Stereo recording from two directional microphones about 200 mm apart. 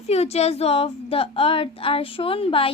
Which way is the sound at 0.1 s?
30° left (ahead or behind).